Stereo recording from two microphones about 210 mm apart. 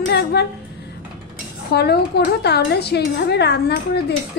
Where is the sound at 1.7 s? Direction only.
50° left (ahead or behind).